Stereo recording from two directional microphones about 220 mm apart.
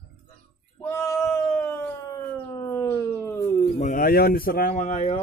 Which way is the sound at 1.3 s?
5° left (ahead or behind).